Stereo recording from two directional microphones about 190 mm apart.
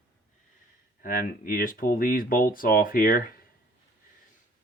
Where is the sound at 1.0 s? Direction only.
50° left (ahead or behind).